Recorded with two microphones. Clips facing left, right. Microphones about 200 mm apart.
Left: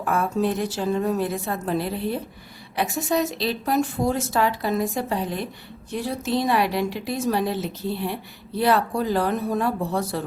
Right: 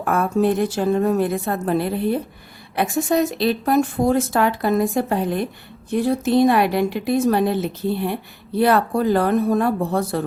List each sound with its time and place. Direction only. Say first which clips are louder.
0.0 s a woman's voice: right 4 dB; 55° right (ahead or behind)